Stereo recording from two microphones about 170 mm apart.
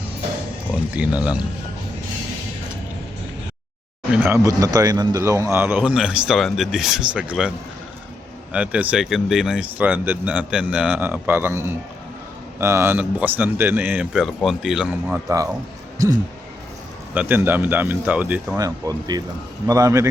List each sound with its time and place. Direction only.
0.9 s speech: 10° right (ahead or behind)
4.2 s speech: 15° right (ahead or behind)
8.5 s speech: 5° right (ahead or behind)
16.0 s speech: 20° right (ahead or behind)
17.2 s speech: 10° right (ahead or behind)
18.6 s speech: 20° right (ahead or behind)